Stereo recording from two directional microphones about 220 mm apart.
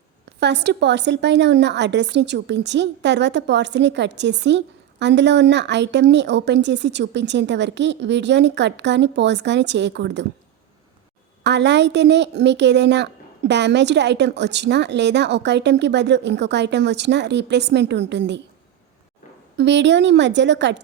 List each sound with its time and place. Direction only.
0.3 s a woman's voice: 50° right (ahead or behind)
11.4 s a woman's voice: 50° right (ahead or behind)
19.5 s a woman's voice: 55° right (ahead or behind)